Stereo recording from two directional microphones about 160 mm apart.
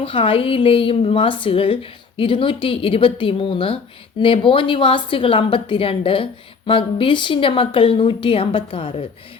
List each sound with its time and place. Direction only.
0.0 s a woman's voice: 35° left (ahead or behind)